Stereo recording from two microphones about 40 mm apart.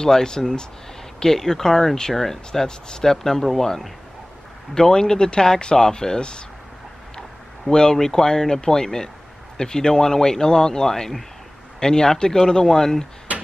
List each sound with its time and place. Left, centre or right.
0.0 s speech: centre
7.7 s speech: centre